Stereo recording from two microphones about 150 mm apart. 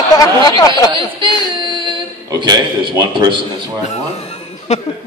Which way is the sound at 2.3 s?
30° right (ahead or behind).